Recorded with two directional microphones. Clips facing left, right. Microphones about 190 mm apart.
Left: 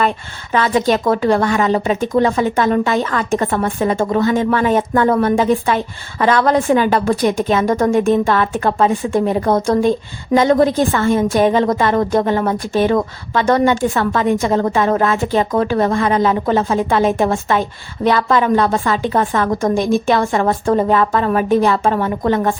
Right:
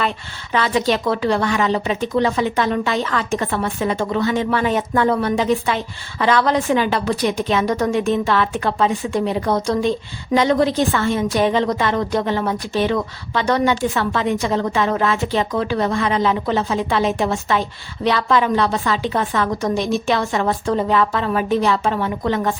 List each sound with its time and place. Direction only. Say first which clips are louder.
0.5 s a woman's voice: left 3 dB; 45° left (ahead or behind)